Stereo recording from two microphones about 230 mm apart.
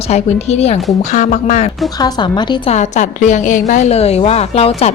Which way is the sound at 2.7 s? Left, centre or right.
Left.